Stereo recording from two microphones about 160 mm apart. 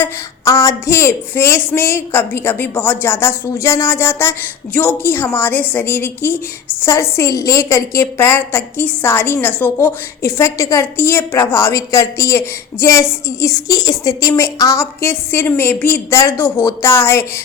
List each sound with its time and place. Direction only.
0.0 s speech: 20° left (ahead or behind)